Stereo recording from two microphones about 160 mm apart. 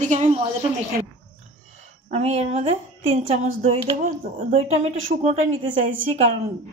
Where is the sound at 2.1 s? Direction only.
40° right (ahead or behind).